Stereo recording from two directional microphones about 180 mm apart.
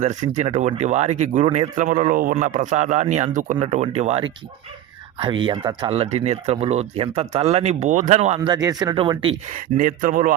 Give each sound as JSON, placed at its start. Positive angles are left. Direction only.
{"t": 0.0, "sound": "speech", "side_deg": -40}
{"t": 8.4, "sound": "speech", "side_deg": -20}
{"t": 9.6, "sound": "speech", "side_deg": -50}